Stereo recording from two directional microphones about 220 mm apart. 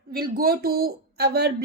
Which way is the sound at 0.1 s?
40° right (ahead or behind).